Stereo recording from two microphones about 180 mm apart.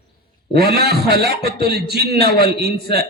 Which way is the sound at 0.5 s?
60° right (ahead or behind).